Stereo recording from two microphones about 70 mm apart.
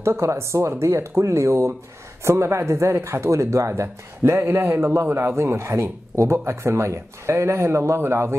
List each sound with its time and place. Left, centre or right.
0.0 s speech: right